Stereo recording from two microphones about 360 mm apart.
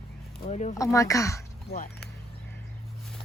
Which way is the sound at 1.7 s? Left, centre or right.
Left.